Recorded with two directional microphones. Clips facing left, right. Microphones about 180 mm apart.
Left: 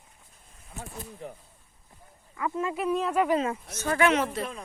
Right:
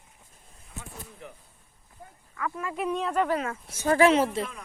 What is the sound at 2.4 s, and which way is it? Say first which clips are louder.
Speech: left 3 dB; 25° left (ahead or behind).